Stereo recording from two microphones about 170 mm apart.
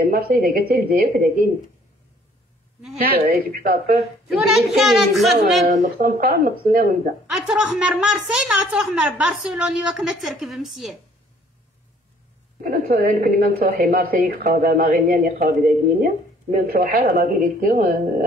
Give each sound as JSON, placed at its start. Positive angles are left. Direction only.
{"t": 0.1, "sound": "a woman's voice", "side_deg": -60}
{"t": 3.0, "sound": "a woman's voice", "side_deg": -65}
{"t": 4.3, "sound": "a woman's voice", "side_deg": 0}
{"t": 5.7, "sound": "a woman's voice", "side_deg": -60}
{"t": 7.2, "sound": "a woman's voice", "side_deg": -5}
{"t": 12.6, "sound": "a woman's voice", "side_deg": -55}